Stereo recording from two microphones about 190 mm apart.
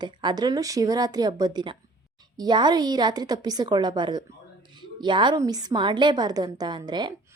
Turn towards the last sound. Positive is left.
turn(degrees=-25)  # may be behind; listen again after turning